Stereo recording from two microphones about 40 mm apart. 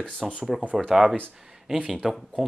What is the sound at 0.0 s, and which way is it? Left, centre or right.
Speech, left.